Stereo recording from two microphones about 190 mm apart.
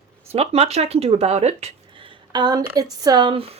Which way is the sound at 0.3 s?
35° right (ahead or behind).